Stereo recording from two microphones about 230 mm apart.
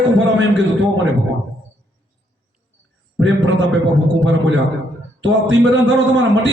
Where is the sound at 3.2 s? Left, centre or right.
Right.